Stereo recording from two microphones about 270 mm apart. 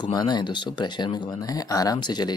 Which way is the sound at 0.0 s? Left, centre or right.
Centre.